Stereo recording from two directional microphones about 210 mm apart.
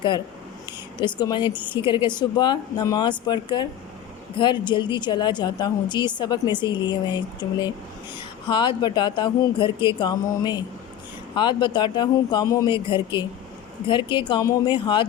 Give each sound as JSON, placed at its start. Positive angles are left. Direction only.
{"t": 0.9, "sound": "a woman's voice", "side_deg": 20}